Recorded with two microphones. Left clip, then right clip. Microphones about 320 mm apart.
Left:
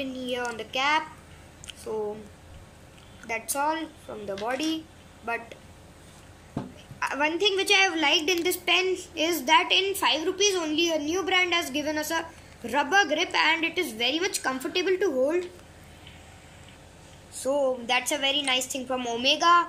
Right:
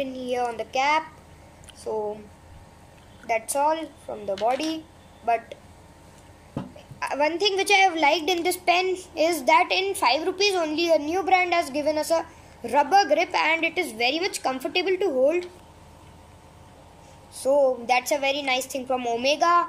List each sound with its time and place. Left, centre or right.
0.0 s a woman's voice: centre
3.3 s a woman's voice: centre
7.0 s a woman's voice: centre
17.5 s a woman's voice: centre
18.6 s a woman's voice: right
18.9 s a woman's voice: centre